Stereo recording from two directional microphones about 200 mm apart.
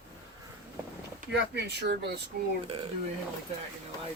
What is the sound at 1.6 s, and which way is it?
Speech, 55° right (ahead or behind).